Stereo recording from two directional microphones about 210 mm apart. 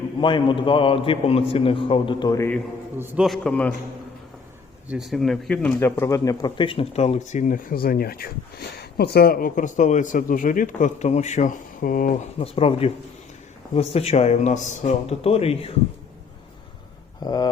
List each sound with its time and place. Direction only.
0.2 s speech: 20° left (ahead or behind)
3.0 s a man's voice: 10° right (ahead or behind)
3.2 s a man's voice: 5° left (ahead or behind)
4.9 s a man's voice: centre (ahead or behind); by 12.3 s 40° left (ahead or behind)
12.4 s a man's voice: 25° left (ahead or behind)
17.2 s speech: 20° left (ahead or behind)